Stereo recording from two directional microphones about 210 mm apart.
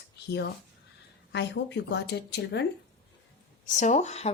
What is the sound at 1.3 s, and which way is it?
Speech, 55° left (ahead or behind).